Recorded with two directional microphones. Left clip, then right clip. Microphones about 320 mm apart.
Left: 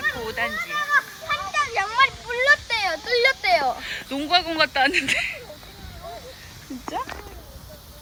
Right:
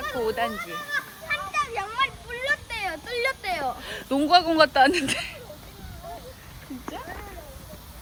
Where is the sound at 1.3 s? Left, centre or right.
Left.